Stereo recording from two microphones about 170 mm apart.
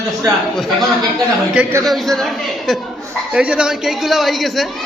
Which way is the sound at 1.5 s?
15° right (ahead or behind).